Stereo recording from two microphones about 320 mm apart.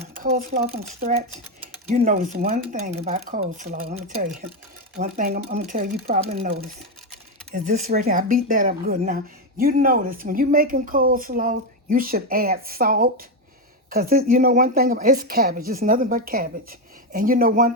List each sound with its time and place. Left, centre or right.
0.2 s speech: right